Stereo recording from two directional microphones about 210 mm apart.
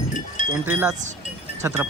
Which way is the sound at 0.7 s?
5° right (ahead or behind).